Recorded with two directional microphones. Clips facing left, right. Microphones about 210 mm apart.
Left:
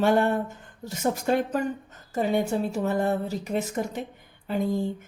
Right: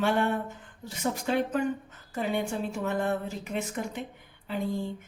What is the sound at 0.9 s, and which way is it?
A woman's voice, 45° left (ahead or behind).